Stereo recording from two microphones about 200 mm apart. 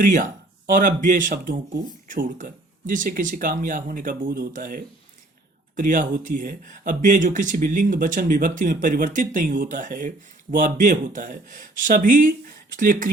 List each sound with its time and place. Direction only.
0.0 s speech: 40° right (ahead or behind)